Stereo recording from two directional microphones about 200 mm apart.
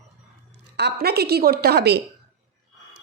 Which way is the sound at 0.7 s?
55° right (ahead or behind).